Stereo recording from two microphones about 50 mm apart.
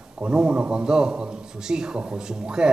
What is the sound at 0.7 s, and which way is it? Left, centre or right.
A man's voice, centre.